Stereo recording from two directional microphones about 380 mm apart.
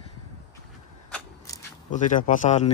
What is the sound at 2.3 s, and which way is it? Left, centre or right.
Speech, centre.